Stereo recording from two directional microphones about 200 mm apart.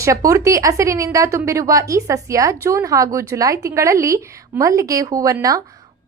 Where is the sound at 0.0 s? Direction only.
15° right (ahead or behind).